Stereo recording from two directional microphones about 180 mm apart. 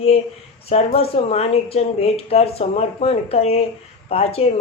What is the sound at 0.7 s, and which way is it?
A woman's voice, 35° left (ahead or behind).